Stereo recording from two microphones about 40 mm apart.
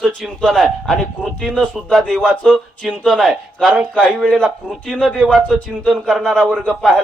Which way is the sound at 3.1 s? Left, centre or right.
Centre.